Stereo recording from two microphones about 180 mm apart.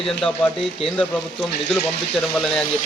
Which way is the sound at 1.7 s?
5° left (ahead or behind).